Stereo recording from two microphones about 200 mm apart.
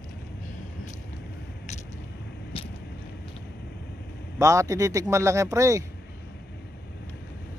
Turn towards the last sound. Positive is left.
turn(degrees=-15)  # may be behind; listen again after turning